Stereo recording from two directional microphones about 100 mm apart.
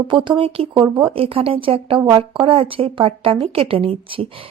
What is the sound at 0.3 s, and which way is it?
A woman's voice, 65° right (ahead or behind).